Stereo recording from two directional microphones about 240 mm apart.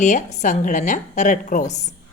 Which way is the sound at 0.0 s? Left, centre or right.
Left.